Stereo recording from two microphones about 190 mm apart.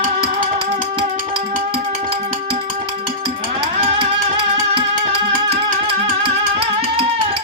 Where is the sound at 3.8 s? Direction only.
30° right (ahead or behind).